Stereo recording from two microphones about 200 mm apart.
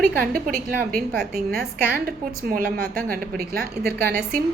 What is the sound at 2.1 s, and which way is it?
A woman's voice, 45° right (ahead or behind).